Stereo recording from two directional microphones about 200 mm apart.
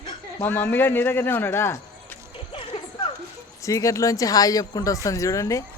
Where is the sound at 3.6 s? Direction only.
15° left (ahead or behind).